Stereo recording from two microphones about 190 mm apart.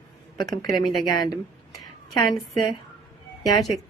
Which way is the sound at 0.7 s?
20° left (ahead or behind).